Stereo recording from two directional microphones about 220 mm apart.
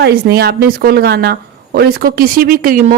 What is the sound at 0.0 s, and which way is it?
A woman's voice, 45° right (ahead or behind).